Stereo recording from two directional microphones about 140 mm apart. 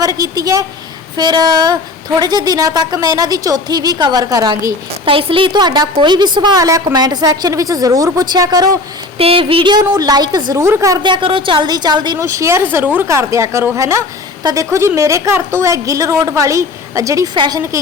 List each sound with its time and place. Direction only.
0.0 s a sound: 25° right (ahead or behind)
1.1 s a woman's voice: 30° right (ahead or behind)
5.0 s a woman's voice: 40° right (ahead or behind)
9.1 s a woman's voice: 40° right (ahead or behind); by 11.0 s 25° right (ahead or behind)
11.0 s a woman's voice: 35° right (ahead or behind)
12.2 s a woman's voice: 20° right (ahead or behind)
17.3 s a woman's voice: 35° right (ahead or behind)